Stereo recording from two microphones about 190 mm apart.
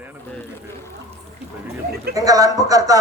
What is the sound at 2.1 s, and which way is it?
Speech, 20° right (ahead or behind).